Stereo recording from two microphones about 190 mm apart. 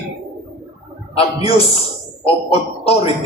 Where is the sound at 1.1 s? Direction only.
30° left (ahead or behind).